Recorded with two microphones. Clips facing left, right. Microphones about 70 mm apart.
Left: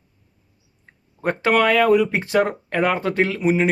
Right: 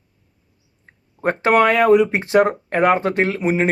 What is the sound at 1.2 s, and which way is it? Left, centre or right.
Speech, right.